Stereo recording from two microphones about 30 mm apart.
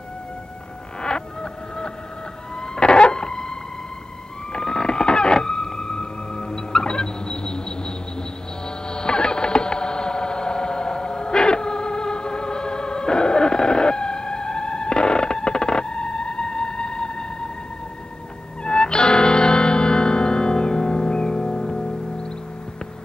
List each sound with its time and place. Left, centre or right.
1.0 s a sound: left
4.5 s whale vocalization: left
18.6 s music: left